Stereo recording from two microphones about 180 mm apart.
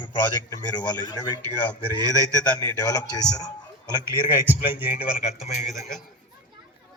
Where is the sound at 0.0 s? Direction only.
25° left (ahead or behind).